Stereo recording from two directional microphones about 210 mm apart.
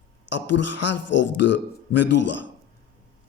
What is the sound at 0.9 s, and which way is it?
Speech, 60° left (ahead or behind).